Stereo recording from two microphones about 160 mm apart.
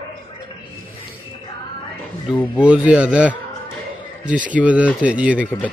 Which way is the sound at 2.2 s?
30° left (ahead or behind).